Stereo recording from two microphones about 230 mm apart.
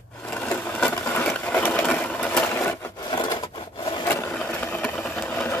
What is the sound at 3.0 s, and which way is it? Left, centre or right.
Wood, centre.